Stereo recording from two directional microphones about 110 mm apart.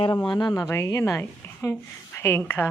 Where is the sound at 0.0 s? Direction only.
40° left (ahead or behind).